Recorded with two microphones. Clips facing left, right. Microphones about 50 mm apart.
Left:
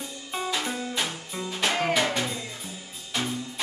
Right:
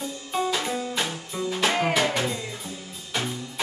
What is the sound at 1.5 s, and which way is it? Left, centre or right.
Music, centre.